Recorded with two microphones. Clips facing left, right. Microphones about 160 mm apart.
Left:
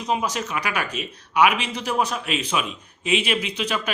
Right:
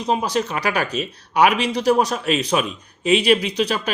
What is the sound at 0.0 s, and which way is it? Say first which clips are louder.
Speech: right 4 dB; 35° right (ahead or behind).